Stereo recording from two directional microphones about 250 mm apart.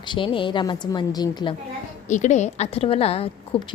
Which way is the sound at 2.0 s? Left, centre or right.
Left.